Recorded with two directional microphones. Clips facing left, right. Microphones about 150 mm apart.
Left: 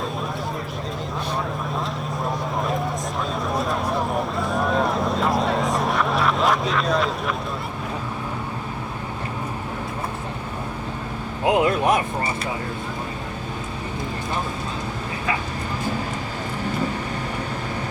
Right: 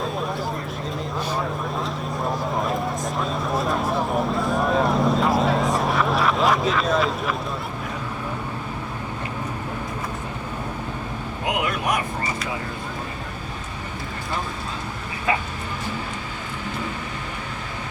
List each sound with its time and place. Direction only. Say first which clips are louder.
3.5 s vehicle: right 1 dB; centre (ahead or behind)
11.4 s speech: left 6 dB; 30° left (ahead or behind)